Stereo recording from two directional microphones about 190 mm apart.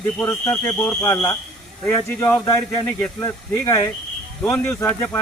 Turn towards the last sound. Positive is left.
turn(degrees=10)  # may be behind; listen again after turning